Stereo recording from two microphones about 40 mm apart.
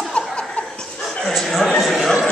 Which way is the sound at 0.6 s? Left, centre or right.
Left.